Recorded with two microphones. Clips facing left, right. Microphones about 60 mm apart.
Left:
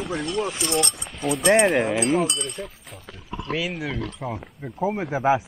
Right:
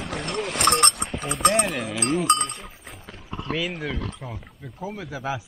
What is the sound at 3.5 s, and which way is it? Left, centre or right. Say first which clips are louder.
Speech: left 1 dB; centre.